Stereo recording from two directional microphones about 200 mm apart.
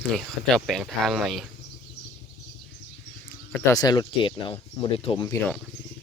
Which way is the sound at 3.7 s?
20° left (ahead or behind).